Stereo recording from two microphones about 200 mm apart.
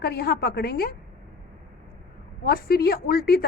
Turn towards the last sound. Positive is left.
turn(degrees=50)  # may be behind; listen again after turning